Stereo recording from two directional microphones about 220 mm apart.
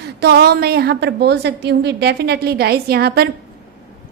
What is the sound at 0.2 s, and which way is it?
A woman's voice, 45° right (ahead or behind).